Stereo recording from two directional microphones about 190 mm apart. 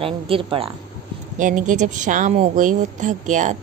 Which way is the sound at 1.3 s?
40° right (ahead or behind).